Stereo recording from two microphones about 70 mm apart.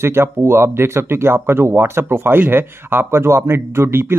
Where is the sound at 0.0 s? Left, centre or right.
Right.